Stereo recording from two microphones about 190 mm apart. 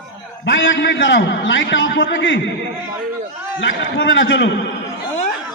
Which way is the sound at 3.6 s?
75° left (ahead or behind).